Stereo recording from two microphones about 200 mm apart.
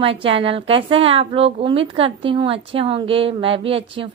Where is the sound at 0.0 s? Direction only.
25° right (ahead or behind).